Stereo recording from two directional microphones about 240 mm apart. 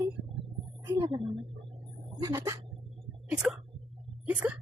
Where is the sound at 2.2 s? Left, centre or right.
Centre.